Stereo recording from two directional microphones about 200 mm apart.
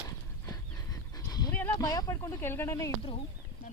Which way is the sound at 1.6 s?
15° left (ahead or behind).